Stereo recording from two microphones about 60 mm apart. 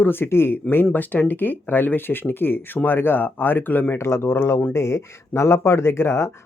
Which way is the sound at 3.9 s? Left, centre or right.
Left.